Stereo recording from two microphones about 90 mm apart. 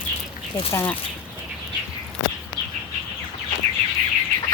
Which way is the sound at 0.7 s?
25° left (ahead or behind).